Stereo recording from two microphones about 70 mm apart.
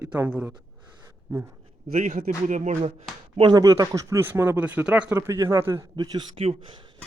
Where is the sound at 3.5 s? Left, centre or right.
Right.